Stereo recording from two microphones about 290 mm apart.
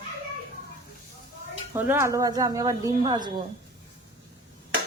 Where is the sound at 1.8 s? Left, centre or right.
Centre.